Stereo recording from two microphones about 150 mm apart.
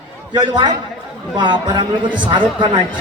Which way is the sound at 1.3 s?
30° right (ahead or behind).